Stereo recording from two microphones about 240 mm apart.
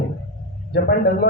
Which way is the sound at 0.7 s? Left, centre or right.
Left.